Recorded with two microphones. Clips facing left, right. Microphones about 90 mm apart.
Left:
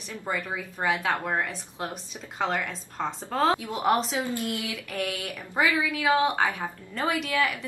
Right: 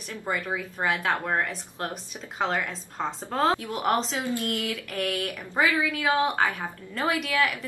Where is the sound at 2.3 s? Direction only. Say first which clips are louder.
Right 1 dB; centre (ahead or behind).